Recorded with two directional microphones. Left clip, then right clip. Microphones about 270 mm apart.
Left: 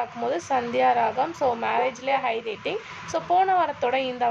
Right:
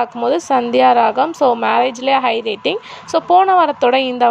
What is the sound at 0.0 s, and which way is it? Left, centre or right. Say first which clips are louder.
A woman's voice: right 10 dB; right.